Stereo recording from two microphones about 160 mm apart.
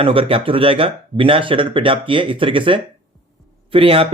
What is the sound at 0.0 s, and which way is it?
Speech, 35° right (ahead or behind).